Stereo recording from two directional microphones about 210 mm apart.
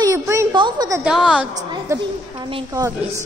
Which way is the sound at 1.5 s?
20° right (ahead or behind).